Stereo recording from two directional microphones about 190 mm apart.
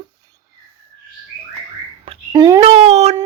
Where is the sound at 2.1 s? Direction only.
20° right (ahead or behind).